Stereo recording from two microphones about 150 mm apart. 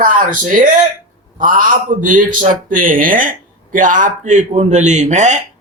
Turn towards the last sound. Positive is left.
turn(degrees=-55)  # may be behind; listen again after turning